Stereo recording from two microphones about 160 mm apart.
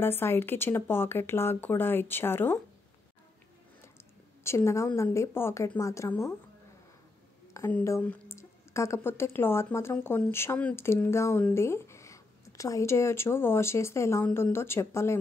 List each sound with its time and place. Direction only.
0.0 s speech: 15° left (ahead or behind)
4.4 s speech: 15° left (ahead or behind)
7.5 s speech: 15° left (ahead or behind)